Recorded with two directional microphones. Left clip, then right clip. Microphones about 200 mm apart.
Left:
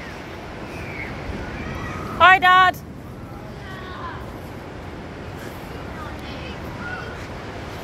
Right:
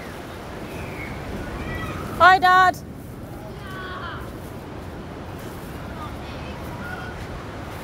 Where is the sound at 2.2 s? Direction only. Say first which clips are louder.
Left 1 dB; 25° right (ahead or behind).